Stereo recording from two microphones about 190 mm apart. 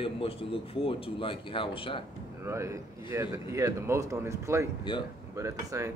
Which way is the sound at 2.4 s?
15° right (ahead or behind).